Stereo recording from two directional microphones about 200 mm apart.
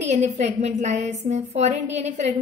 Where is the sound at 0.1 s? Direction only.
35° right (ahead or behind).